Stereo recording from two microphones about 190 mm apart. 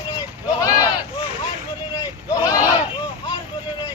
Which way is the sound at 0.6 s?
20° left (ahead or behind).